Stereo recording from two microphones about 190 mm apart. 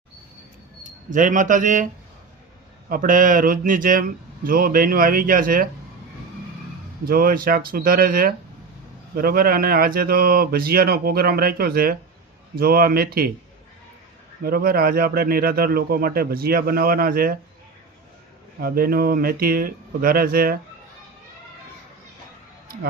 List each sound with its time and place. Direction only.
0.9 s speech: 45° right (ahead or behind)
2.9 s speech: 45° right (ahead or behind)
7.0 s speech: 50° right (ahead or behind)
14.4 s speech: 50° right (ahead or behind)
18.6 s speech: 50° right (ahead or behind)